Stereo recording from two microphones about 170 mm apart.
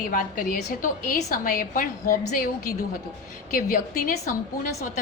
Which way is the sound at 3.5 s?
55° left (ahead or behind).